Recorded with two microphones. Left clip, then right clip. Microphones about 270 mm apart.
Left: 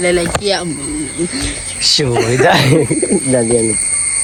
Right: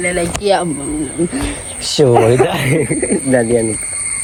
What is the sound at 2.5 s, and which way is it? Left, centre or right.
Speech, left.